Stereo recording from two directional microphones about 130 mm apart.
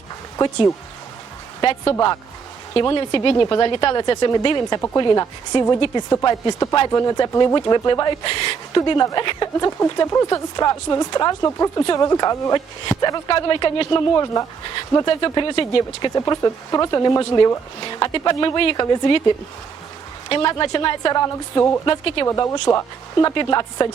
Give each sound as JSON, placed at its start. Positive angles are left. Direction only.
{"t": 0.3, "sound": "speech", "side_deg": 30}
{"t": 2.8, "sound": "a woman's voice", "side_deg": 25}
{"t": 3.1, "sound": "a woman's voice", "side_deg": 40}
{"t": 16.1, "sound": "speech", "side_deg": 25}
{"t": 20.3, "sound": "speech", "side_deg": 35}
{"t": 21.8, "sound": "speech", "side_deg": 40}
{"t": 22.3, "sound": "a woman's voice", "side_deg": 25}
{"t": 23.3, "sound": "speech", "side_deg": 35}